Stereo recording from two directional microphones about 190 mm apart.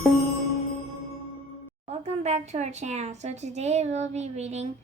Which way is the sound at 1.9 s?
35° right (ahead or behind).